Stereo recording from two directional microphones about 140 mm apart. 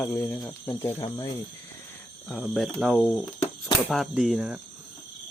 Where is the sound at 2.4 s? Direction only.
5° right (ahead or behind).